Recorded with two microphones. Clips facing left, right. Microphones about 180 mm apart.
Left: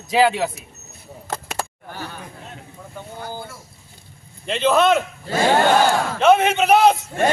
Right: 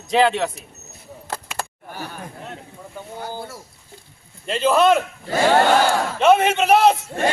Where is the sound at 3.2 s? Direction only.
35° right (ahead or behind).